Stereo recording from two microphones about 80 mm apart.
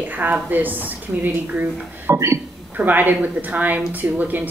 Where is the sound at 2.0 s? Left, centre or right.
Right.